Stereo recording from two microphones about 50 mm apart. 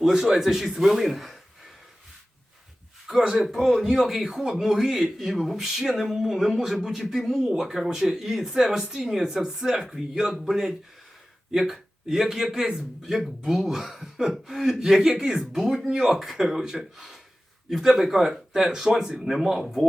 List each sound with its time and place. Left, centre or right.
0.0 s a man's voice: centre
3.1 s speech: centre
3.4 s a man's voice: centre